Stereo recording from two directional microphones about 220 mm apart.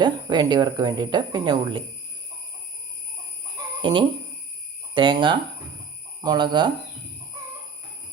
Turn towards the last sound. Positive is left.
turn(degrees=-20)  # may be behind; listen again after turning